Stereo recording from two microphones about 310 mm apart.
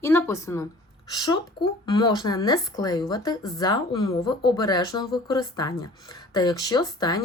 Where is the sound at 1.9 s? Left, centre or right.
Centre.